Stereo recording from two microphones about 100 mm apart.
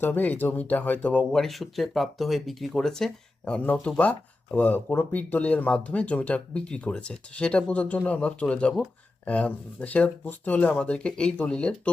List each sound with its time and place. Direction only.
0.0 s speech: 15° left (ahead or behind)